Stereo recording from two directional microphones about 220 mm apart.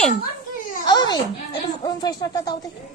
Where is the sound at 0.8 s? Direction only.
20° left (ahead or behind).